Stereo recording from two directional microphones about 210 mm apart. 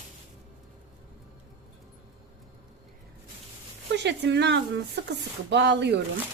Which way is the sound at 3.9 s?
55° right (ahead or behind).